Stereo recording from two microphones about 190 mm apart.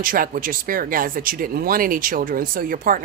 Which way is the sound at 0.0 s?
45° right (ahead or behind).